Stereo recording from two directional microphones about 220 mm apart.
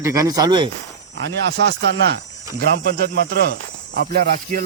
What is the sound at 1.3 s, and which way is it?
Speech, 55° right (ahead or behind).